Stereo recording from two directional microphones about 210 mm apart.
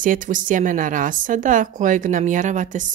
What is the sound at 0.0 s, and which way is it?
Speech, 40° right (ahead or behind).